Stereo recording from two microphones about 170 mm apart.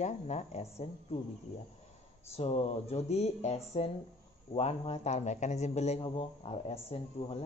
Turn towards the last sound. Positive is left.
turn(degrees=35)  # may be behind; listen again after turning